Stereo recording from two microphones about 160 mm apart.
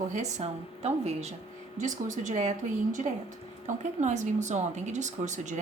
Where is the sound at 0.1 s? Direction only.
45° right (ahead or behind).